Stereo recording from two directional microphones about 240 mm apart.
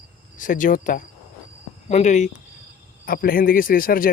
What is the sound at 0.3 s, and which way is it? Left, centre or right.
Speech, left.